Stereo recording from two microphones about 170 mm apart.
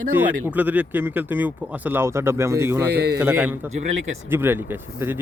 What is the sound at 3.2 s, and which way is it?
Speech, 10° right (ahead or behind).